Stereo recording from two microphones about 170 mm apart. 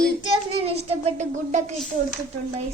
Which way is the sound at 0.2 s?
35° right (ahead or behind).